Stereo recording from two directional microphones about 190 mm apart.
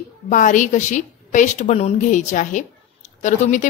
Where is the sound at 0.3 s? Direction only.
40° left (ahead or behind).